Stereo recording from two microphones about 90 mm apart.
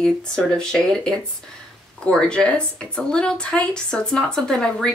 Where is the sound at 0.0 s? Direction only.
10° left (ahead or behind).